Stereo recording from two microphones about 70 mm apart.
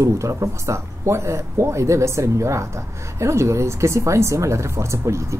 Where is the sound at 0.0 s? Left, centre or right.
Right.